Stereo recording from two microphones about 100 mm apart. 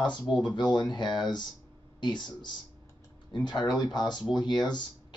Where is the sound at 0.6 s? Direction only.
45° left (ahead or behind).